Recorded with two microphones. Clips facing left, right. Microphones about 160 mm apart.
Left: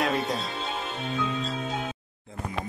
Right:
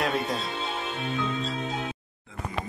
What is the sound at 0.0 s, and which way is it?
Speech, centre (ahead or behind).